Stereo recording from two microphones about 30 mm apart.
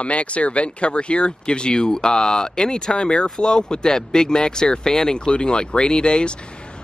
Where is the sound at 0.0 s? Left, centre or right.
Left.